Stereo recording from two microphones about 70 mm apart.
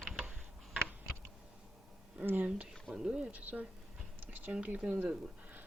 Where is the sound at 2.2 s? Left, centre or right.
Right.